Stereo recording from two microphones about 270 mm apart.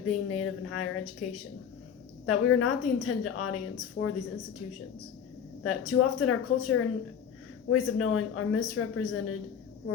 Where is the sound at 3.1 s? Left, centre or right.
Left.